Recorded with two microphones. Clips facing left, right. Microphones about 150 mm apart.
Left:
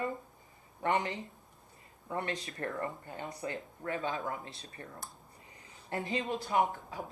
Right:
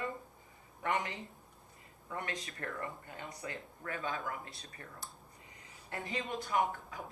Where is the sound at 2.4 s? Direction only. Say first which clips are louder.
Left 5 dB; 35° left (ahead or behind).